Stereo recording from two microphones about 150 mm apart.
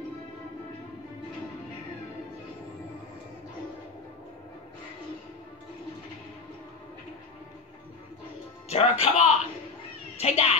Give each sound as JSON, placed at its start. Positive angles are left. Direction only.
{"t": 8.6, "sound": "a child's voice", "side_deg": 45}